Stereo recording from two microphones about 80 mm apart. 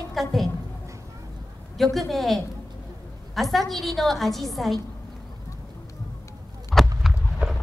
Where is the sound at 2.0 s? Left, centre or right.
Centre.